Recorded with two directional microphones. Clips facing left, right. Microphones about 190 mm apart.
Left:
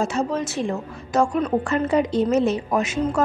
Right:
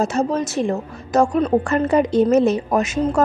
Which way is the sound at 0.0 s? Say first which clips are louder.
Right 3 dB; 40° right (ahead or behind).